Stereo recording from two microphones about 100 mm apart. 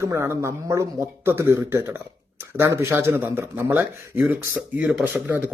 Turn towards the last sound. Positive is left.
turn(degrees=-5)  # may be behind; listen again after turning